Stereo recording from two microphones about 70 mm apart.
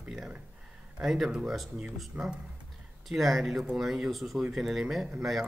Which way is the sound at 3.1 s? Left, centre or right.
Centre.